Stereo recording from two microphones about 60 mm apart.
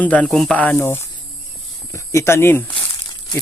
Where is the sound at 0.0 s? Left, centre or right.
Left.